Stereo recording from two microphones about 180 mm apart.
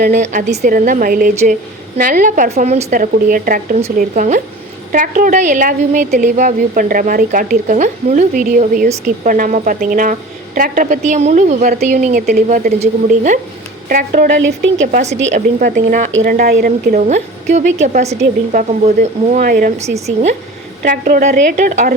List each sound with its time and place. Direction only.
0.0 s a woman's voice: 45° right (ahead or behind)
16.9 s a woman's voice: 40° right (ahead or behind)
19.8 s a woman's voice: 35° right (ahead or behind)
20.8 s a woman's voice: 50° right (ahead or behind)